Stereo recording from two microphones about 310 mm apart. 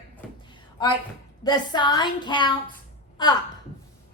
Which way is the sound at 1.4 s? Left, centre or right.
Centre.